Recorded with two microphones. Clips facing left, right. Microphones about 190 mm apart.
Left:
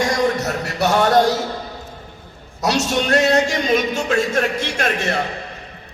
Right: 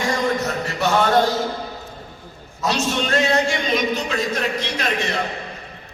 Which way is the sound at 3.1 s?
40° left (ahead or behind).